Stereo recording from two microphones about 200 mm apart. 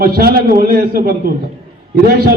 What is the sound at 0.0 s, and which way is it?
A man's voice, 50° right (ahead or behind).